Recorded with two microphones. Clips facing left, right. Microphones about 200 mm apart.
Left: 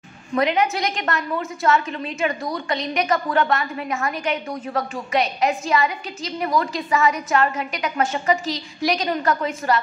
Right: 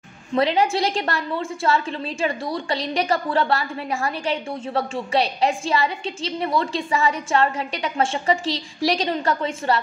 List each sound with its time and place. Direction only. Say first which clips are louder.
0.3 s a woman's voice: right 1 dB; 30° right (ahead or behind)